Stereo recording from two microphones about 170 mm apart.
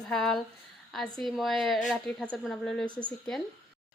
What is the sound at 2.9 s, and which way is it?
Speech, 25° left (ahead or behind).